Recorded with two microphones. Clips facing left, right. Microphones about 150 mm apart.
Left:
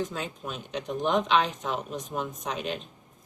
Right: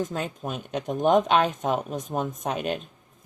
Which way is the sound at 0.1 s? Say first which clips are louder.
Right 4 dB; 50° right (ahead or behind).